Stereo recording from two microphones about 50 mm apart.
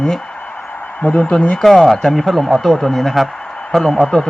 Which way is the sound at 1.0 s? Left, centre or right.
Left.